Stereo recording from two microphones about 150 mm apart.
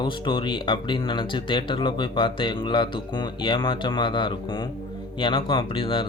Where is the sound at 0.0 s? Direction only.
35° left (ahead or behind).